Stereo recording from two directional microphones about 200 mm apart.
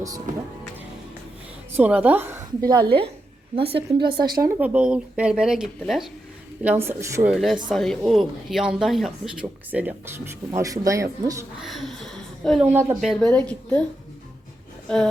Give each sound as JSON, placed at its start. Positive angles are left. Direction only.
{"t": 0.3, "sound": "speech", "side_deg": -40}
{"t": 1.7, "sound": "a woman's voice", "side_deg": -5}
{"t": 4.6, "sound": "a woman's voice", "side_deg": -5}
{"t": 11.6, "sound": "speech", "side_deg": 0}
{"t": 12.6, "sound": "a woman's voice", "side_deg": -10}
{"t": 13.0, "sound": "speech", "side_deg": 0}
{"t": 14.8, "sound": "speech", "side_deg": 5}